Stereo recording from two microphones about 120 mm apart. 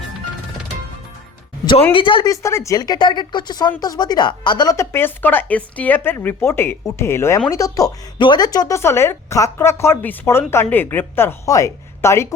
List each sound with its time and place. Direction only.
1.9 s speech: 45° left (ahead or behind)
2.2 s speech: 25° left (ahead or behind)